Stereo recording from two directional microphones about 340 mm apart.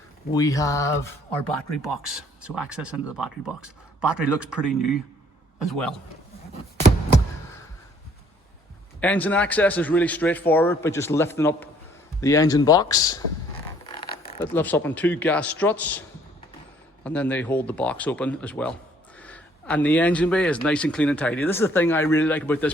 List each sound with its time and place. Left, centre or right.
0.3 s speech: centre
2.0 s speech: centre
9.0 s speech: centre
14.3 s speech: centre